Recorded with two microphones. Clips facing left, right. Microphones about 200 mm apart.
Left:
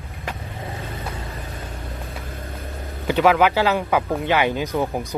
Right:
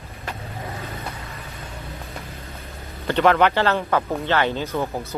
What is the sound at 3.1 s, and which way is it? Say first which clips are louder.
Speech: left 1 dB; 5° left (ahead or behind).